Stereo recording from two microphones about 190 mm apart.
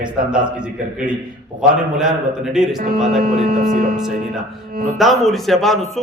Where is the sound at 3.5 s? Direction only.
50° right (ahead or behind).